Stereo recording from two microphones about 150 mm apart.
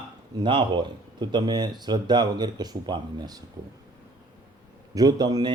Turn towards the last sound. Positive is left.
turn(degrees=-25)  # may be behind; listen again after turning